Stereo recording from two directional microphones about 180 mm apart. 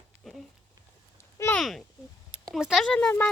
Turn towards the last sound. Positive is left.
turn(degrees=5)  # may be behind; listen again after turning